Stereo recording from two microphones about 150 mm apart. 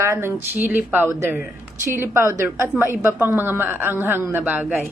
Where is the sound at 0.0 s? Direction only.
15° right (ahead or behind).